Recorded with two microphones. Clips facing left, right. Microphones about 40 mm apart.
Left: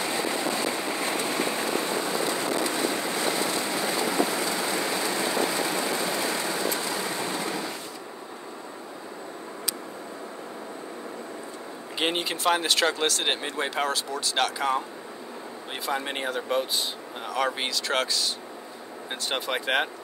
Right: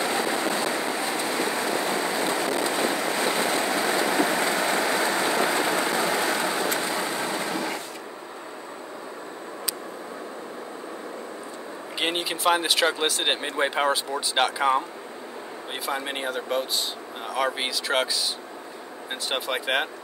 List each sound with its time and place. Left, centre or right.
0.0 s vehicle: right
1.5 s a sound: right
5.8 s train: right
12.0 s speech: centre
15.8 s speech: centre
19.2 s speech: centre